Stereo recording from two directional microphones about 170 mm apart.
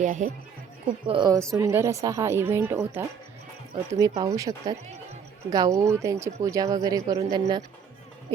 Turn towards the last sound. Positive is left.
turn(degrees=-25)  # may be behind; listen again after turning